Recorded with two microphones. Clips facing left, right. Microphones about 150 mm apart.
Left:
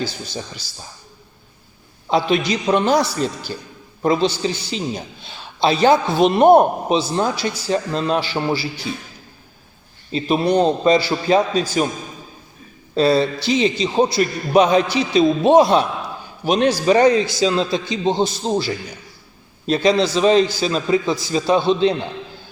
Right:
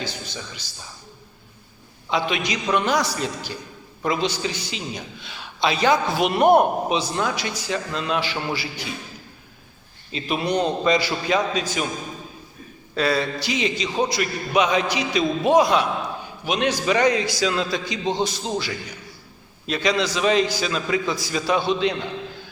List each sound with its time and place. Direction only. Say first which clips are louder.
0.0 s a man's voice: left 5 dB; 35° left (ahead or behind)
2.0 s a man's voice: left 6 dB; 35° left (ahead or behind)
10.1 s a man's voice: left 6 dB; 35° left (ahead or behind)
12.9 s a man's voice: left 6 dB; 30° left (ahead or behind)